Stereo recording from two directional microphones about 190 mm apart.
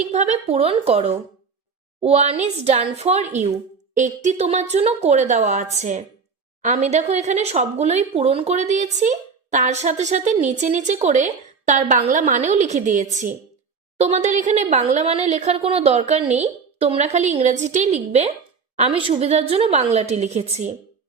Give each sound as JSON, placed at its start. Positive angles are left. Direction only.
{"t": 0.1, "sound": "speech", "side_deg": -35}